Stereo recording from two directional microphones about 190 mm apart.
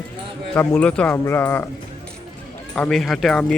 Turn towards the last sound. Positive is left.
turn(degrees=5)  # may be behind; listen again after turning